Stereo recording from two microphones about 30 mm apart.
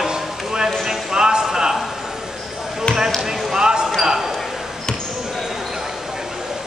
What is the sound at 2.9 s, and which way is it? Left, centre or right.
Basketball bounce, left.